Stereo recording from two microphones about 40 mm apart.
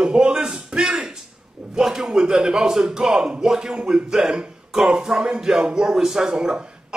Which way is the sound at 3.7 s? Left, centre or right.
Right.